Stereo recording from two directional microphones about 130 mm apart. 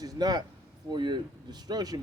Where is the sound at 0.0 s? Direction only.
30° right (ahead or behind).